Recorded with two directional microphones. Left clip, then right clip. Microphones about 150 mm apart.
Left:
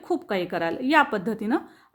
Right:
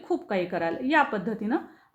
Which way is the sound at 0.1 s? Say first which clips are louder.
Left 1 dB; 40° left (ahead or behind).